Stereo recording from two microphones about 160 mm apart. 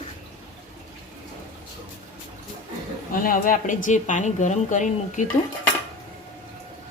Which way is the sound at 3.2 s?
60° left (ahead or behind).